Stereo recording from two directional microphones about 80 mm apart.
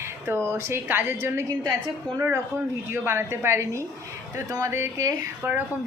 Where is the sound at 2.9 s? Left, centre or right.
Right.